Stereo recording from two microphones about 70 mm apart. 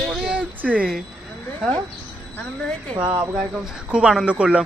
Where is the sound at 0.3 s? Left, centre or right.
Centre.